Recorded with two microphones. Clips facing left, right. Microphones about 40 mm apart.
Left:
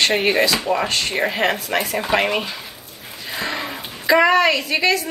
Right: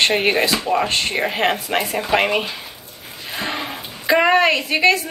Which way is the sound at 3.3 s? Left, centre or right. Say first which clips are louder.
Even; right.